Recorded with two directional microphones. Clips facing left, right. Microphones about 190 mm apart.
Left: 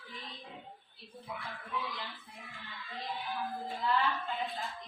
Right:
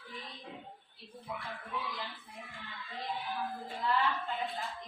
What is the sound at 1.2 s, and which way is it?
Speech, centre (ahead or behind).